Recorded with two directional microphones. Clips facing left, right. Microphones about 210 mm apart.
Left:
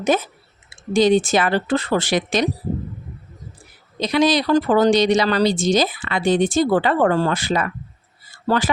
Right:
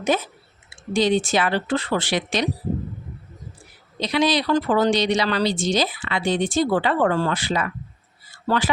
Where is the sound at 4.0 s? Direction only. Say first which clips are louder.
Left 3 dB; 45° left (ahead or behind).